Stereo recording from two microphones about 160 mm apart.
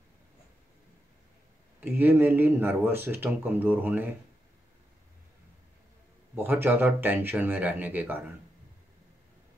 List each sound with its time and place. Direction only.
1.8 s speech: 10° right (ahead or behind)
6.3 s speech: 15° right (ahead or behind)